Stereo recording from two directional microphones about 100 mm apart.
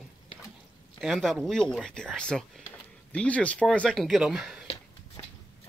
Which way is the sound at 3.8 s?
Centre (ahead or behind).